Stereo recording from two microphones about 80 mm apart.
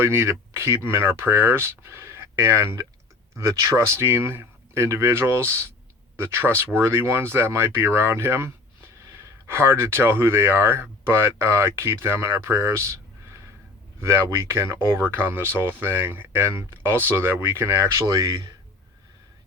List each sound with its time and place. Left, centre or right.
0.0 s speech: right
4.0 s speech: right
18.0 s speech: right